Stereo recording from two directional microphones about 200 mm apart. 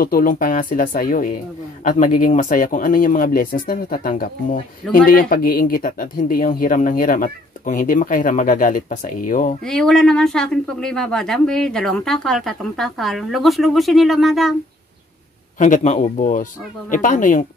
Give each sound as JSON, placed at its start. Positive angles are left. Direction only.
{"t": 0.0, "sound": "speech", "side_deg": 45}
{"t": 9.7, "sound": "speech", "side_deg": 5}
{"t": 15.6, "sound": "speech", "side_deg": 40}